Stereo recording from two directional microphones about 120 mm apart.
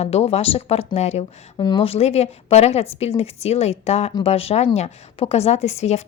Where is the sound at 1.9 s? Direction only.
60° left (ahead or behind).